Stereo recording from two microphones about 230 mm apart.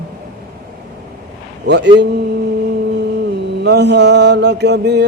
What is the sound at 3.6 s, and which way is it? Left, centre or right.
Mantra, right.